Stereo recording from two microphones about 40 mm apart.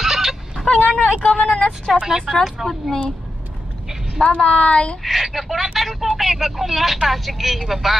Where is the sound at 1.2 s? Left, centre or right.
Left.